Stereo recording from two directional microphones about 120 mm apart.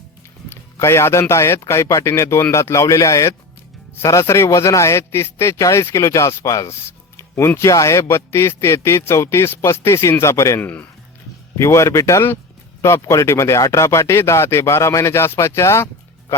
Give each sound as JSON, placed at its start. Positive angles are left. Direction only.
{"t": 0.5, "sound": "speech", "side_deg": 20}